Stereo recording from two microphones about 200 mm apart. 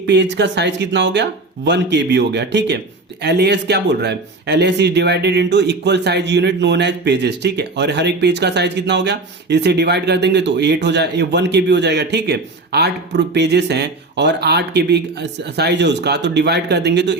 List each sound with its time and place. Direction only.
0.0 s speech: 60° right (ahead or behind)